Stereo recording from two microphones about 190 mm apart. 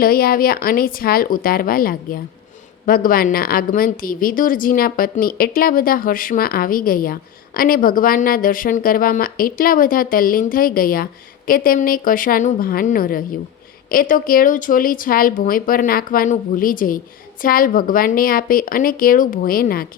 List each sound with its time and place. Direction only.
0.0 s a woman's voice: 50° left (ahead or behind)